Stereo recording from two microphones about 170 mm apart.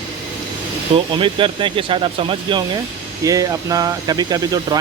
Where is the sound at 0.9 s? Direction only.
30° right (ahead or behind).